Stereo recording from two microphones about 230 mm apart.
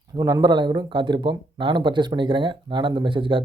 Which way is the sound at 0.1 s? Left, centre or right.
Centre.